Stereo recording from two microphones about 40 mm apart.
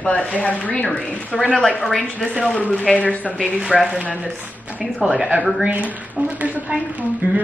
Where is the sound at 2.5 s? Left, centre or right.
Left.